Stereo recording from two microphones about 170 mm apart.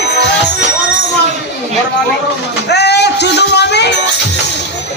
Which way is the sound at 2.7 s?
80° left.